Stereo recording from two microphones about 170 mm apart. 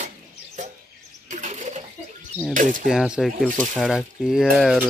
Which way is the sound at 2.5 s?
50° right (ahead or behind).